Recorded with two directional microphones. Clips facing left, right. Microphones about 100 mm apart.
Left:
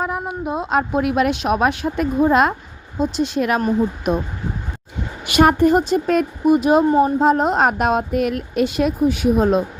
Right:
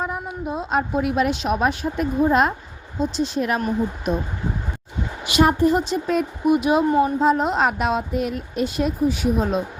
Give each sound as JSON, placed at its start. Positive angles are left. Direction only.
{"t": 0.0, "sound": "a woman's voice", "side_deg": 75}
{"t": 3.0, "sound": "a woman's voice", "side_deg": 60}
{"t": 5.2, "sound": "a woman's voice", "side_deg": 55}
{"t": 6.5, "sound": "speech", "side_deg": 40}